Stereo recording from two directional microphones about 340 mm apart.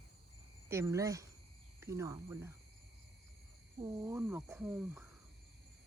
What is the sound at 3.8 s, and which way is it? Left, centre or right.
Speech, centre.